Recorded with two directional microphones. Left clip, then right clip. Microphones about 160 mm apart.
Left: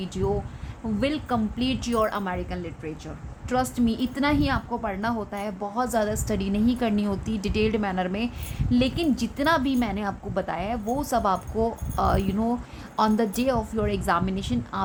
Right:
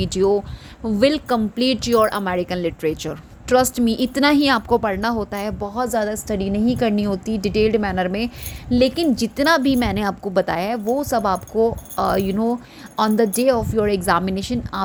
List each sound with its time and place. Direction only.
0.0 s speech: 45° right (ahead or behind); by 3.1 s 65° right (ahead or behind)
3.5 s a woman's voice: 45° right (ahead or behind)
10.9 s a woman's voice: 25° right (ahead or behind)